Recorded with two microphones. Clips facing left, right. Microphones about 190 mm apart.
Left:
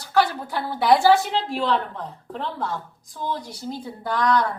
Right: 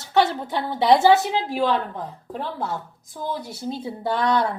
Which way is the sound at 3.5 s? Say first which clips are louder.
Right 3 dB; 25° right (ahead or behind).